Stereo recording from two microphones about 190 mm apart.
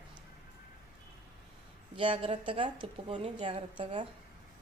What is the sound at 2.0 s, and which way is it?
Speech, 30° right (ahead or behind).